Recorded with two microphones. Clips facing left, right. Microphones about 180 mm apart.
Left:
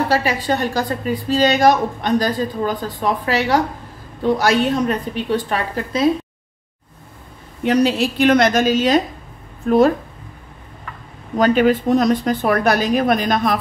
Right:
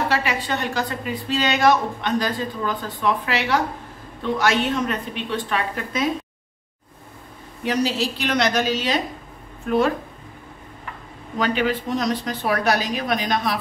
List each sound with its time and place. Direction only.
0.1 s a woman's voice: 35° left (ahead or behind)
7.6 s a woman's voice: 55° left (ahead or behind); by 9.9 s 40° left (ahead or behind)
11.3 s a woman's voice: 45° left (ahead or behind)